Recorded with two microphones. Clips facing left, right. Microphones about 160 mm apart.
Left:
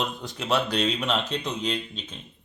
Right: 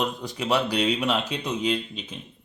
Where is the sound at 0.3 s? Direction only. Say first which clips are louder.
Right 1 dB; 10° right (ahead or behind).